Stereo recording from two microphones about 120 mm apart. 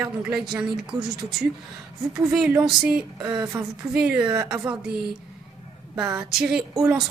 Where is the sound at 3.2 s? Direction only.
30° right (ahead or behind).